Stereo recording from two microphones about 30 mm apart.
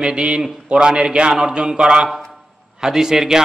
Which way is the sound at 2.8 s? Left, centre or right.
Centre.